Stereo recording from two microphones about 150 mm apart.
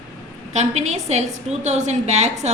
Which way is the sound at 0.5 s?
50° right (ahead or behind).